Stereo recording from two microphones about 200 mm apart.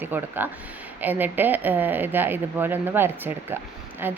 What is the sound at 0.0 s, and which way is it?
A woman's voice, 10° right (ahead or behind).